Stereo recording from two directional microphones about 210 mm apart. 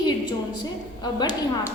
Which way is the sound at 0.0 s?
20° left (ahead or behind).